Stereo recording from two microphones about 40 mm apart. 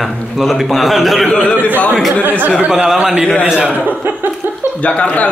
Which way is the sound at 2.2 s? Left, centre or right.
Right.